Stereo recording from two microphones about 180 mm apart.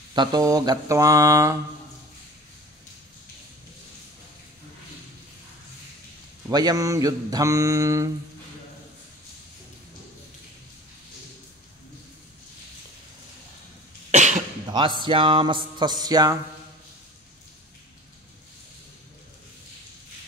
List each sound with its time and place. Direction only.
0.1 s speech: 25° right (ahead or behind)
6.5 s speech: 20° right (ahead or behind)
14.1 s cough: 40° right (ahead or behind)
14.7 s speech: 25° right (ahead or behind)